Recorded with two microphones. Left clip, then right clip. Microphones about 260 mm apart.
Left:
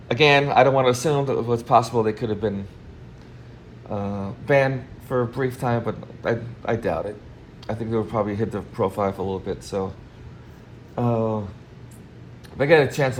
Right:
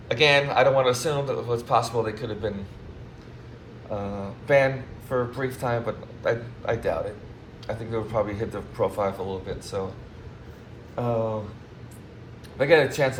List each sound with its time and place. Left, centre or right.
0.1 s speech: left
3.9 s speech: left
10.9 s speech: left
12.5 s speech: left